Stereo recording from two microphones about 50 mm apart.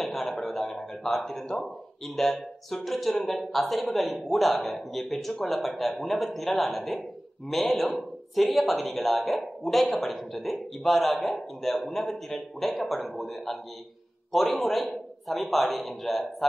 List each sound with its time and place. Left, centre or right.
0.0 s a man's voice: centre